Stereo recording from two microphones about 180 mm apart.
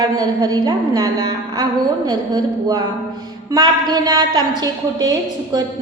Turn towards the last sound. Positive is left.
turn(degrees=-20)  # may be behind; listen again after turning